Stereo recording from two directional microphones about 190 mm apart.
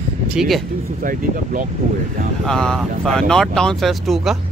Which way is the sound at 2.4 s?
Centre (ahead or behind).